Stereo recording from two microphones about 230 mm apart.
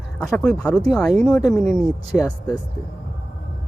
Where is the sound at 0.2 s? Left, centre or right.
Centre.